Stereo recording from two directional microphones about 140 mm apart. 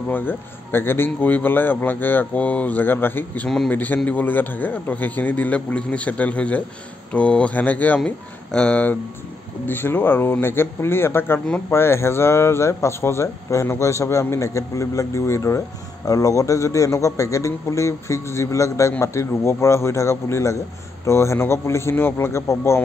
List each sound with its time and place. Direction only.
0.1 s a man's voice: 15° left (ahead or behind)